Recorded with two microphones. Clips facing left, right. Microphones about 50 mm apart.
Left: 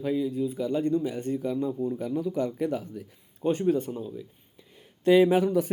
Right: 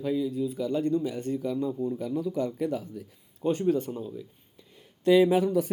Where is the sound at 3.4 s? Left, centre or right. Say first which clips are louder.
Left 1 dB; left.